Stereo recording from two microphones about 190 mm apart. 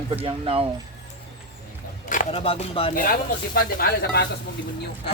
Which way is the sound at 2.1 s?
40° left (ahead or behind).